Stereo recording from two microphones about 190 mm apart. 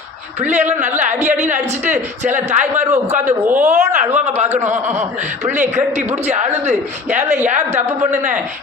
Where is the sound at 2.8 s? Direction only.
40° right (ahead or behind).